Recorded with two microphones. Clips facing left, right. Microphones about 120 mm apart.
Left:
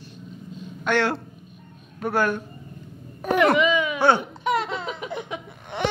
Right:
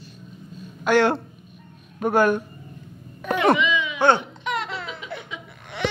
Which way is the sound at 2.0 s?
15° right (ahead or behind).